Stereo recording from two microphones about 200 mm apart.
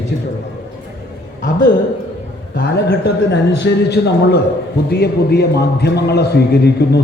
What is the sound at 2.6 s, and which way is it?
A man's voice, 55° left (ahead or behind).